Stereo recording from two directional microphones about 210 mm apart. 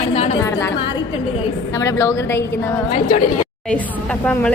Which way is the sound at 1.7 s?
15° left (ahead or behind).